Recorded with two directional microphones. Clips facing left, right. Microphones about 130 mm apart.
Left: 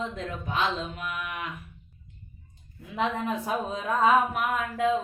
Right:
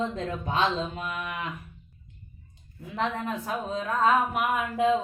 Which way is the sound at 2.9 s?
15° left (ahead or behind).